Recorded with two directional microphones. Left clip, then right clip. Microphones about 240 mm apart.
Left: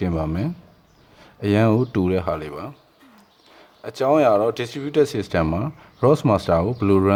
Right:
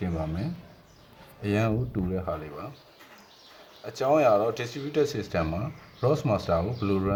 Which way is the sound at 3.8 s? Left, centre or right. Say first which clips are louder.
Left 5 dB; left.